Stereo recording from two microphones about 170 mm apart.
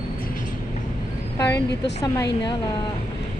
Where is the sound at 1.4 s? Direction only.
20° left (ahead or behind).